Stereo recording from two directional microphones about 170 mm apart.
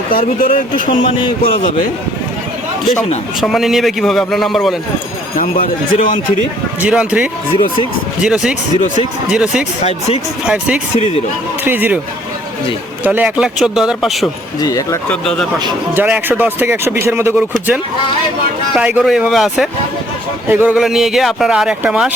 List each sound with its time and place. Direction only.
0.1 s speech: 60° left (ahead or behind)
3.4 s a man's voice: centre (ahead or behind)
5.4 s speech: 55° left (ahead or behind)
6.8 s a man's voice: 5° right (ahead or behind)
10.9 s speech: 40° left (ahead or behind)
11.6 s speech: 10° right (ahead or behind)
13.1 s a man's voice: 5° right (ahead or behind)
14.6 s speech: 20° left (ahead or behind)
15.1 s a man's voice: 5° left (ahead or behind)
16.0 s a man's voice: 5° right (ahead or behind)